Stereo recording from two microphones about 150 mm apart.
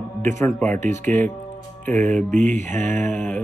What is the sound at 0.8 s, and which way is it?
Mantra, 55° right (ahead or behind).